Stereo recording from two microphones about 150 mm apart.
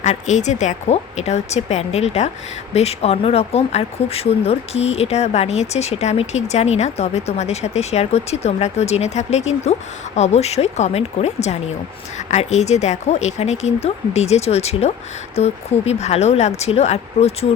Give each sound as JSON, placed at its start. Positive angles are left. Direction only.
{"t": 0.0, "sound": "speech", "side_deg": 50}